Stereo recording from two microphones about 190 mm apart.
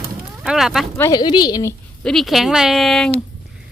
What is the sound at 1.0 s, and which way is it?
Speech, 20° left (ahead or behind).